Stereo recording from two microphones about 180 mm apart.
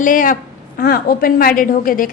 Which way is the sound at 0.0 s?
50° left (ahead or behind).